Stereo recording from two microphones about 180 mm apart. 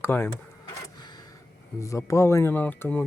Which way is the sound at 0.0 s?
15° left (ahead or behind).